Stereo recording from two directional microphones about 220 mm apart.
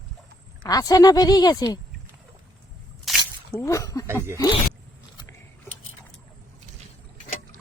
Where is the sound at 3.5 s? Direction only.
15° left (ahead or behind).